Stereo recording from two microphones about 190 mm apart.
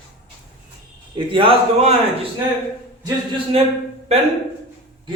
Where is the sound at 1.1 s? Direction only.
25° right (ahead or behind).